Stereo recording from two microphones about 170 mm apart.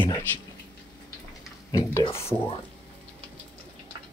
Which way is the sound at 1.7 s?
20° left (ahead or behind).